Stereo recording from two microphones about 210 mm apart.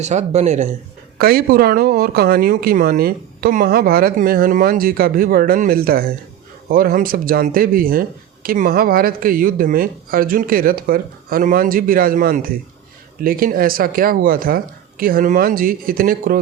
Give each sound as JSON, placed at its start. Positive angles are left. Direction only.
{"t": 0.0, "sound": "speech", "side_deg": -35}
{"t": 1.2, "sound": "speech", "side_deg": -45}